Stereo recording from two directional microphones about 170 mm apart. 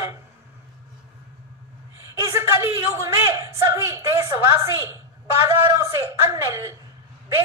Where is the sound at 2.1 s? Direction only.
15° right (ahead or behind).